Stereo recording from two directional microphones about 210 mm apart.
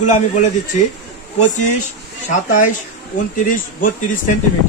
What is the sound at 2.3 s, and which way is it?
A man's voice, 35° left (ahead or behind).